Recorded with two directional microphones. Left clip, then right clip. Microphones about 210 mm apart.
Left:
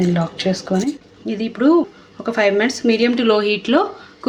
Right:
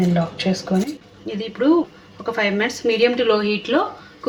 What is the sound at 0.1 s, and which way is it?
Speech, 45° left (ahead or behind).